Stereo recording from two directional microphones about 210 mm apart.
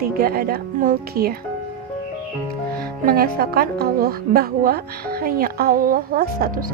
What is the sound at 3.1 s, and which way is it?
Speech, 45° right (ahead or behind).